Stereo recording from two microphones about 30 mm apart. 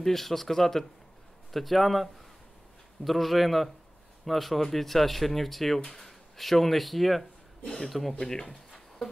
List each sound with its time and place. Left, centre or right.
0.0 s speech: centre
1.5 s a man's voice: centre
8.3 s speech: centre